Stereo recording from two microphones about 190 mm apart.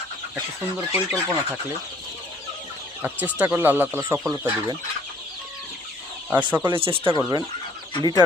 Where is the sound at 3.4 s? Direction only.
10° right (ahead or behind).